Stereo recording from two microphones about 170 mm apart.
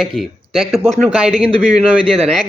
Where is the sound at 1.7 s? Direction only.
35° right (ahead or behind).